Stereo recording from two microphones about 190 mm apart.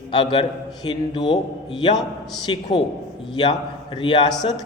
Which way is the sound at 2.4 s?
25° left (ahead or behind).